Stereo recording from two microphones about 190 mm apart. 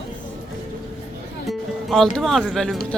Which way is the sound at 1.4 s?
Centre (ahead or behind).